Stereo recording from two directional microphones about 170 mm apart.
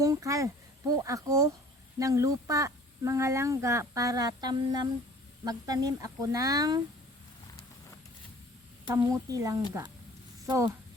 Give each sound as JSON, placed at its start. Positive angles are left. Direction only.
{"t": 0.0, "sound": "speech", "side_deg": -20}
{"t": 9.0, "sound": "speech", "side_deg": -20}